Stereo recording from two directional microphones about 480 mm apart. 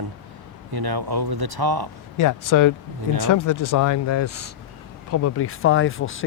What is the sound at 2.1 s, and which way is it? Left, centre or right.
Speech, left.